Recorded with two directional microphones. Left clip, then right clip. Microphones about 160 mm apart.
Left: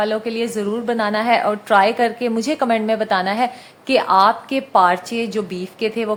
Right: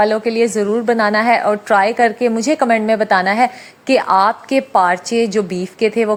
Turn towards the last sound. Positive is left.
turn(degrees=-30)  # may be behind; listen again after turning